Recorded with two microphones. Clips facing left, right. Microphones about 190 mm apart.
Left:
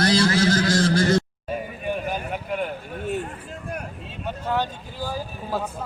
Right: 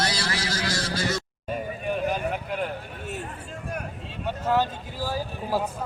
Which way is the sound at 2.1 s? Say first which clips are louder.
Right 1 dB; centre (ahead or behind).